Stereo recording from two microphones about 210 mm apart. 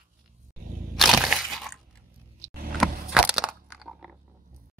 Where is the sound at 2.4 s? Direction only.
45° right (ahead or behind).